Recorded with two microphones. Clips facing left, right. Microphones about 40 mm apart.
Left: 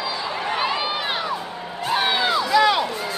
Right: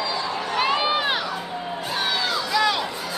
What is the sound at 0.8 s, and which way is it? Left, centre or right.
Crowd, centre.